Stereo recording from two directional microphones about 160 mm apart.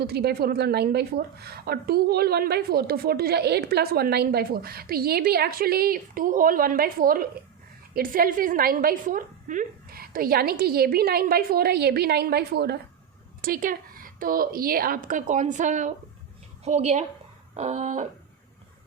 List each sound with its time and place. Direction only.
0.0 s a woman's voice: 80° right
13.4 s a woman's voice: 60° right (ahead or behind); by 18.1 s 45° right (ahead or behind)